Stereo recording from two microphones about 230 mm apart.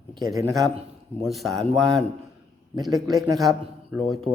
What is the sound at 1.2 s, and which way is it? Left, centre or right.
Speech, centre.